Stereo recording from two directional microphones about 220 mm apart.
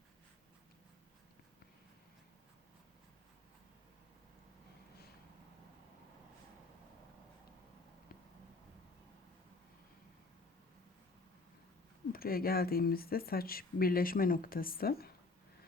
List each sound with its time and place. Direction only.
12.1 s speech: 40° left (ahead or behind)